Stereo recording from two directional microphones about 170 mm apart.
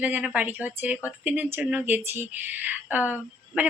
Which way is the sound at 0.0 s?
10° right (ahead or behind).